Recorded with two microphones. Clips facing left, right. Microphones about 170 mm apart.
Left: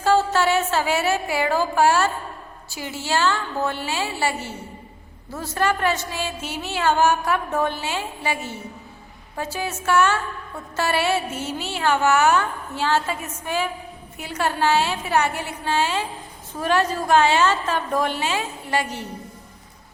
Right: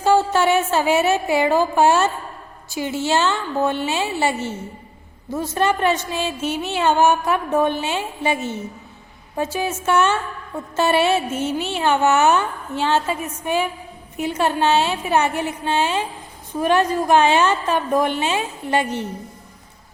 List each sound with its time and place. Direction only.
0.0 s a woman's voice: 15° right (ahead or behind)